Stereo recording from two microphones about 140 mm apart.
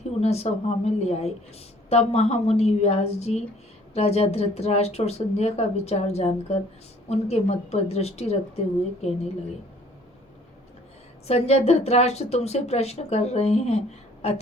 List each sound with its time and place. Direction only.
0.2 s a woman's voice: 50° left (ahead or behind)
11.3 s a woman's voice: 50° left (ahead or behind)